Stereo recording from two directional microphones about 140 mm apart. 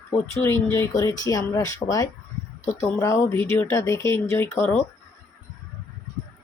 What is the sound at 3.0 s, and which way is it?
A woman's voice, 20° left (ahead or behind).